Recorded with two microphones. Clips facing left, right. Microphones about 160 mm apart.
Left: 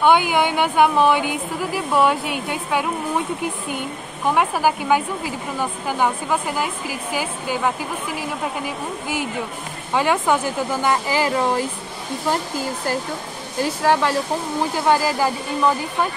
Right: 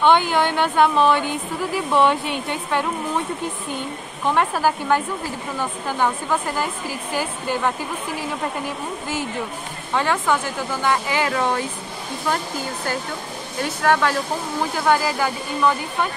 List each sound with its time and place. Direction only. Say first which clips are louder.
0.0 s a woman's voice: left 1 dB; 10° left (ahead or behind)
4.3 s a woman's voice: left 1 dB; 10° left (ahead or behind)
13.6 s speech: left 1 dB; 30° left (ahead or behind)